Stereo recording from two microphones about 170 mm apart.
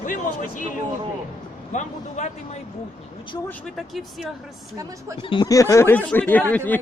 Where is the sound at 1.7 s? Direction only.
45° left (ahead or behind).